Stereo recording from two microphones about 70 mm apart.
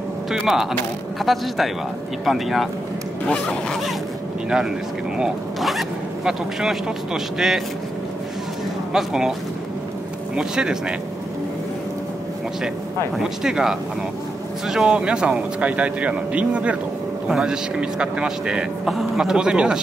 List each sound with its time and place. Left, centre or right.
0.3 s speech: centre
4.5 s speech: centre
8.9 s speech: centre
10.3 s speech: centre
13.2 s speech: centre